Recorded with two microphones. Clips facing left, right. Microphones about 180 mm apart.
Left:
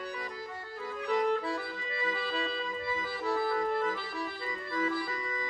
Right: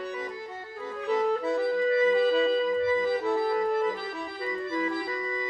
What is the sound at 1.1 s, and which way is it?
Music, 20° right (ahead or behind).